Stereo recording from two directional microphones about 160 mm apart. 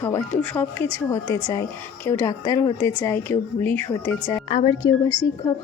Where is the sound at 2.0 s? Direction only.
20° left (ahead or behind).